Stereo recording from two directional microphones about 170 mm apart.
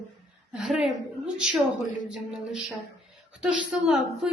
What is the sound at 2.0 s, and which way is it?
A woman's voice, 5° right (ahead or behind).